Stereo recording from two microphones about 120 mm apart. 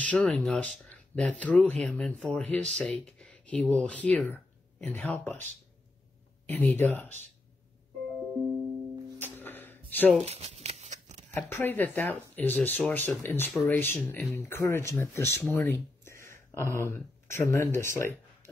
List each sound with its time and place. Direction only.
0.0 s speech: 5° left (ahead or behind)
6.4 s speech: 15° left (ahead or behind)
9.2 s a sound: 15° left (ahead or behind)
10.2 s scissors: 60° right (ahead or behind)
11.3 s speech: 20° left (ahead or behind)